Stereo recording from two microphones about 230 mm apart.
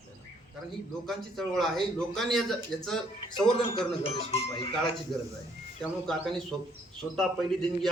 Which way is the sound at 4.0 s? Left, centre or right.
Left.